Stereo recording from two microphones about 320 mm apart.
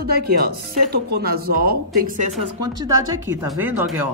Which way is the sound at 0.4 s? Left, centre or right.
Right.